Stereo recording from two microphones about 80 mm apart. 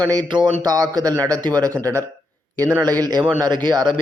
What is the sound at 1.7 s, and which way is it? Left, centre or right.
Speech, right.